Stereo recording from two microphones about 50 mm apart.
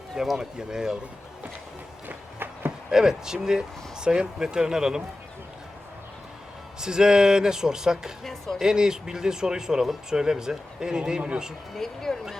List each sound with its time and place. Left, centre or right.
0.2 s speech: centre
2.0 s walk: right
2.9 s speech: centre
6.7 s speech: centre
8.2 s speech: centre
8.5 s speech: centre
11.7 s speech: centre